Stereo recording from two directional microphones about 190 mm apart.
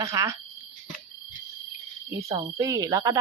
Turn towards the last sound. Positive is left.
turn(degrees=-20)  # may be behind; listen again after turning